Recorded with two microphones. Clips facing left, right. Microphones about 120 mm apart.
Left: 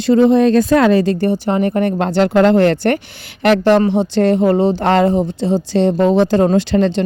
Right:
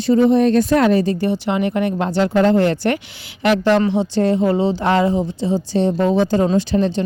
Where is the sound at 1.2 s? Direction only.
45° left (ahead or behind); by 5.2 s 65° left (ahead or behind).